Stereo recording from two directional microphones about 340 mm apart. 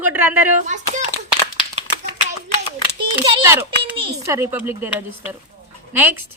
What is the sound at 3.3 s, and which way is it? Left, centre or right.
A child's voice, centre.